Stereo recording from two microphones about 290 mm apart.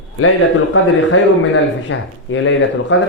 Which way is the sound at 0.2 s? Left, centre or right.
Left.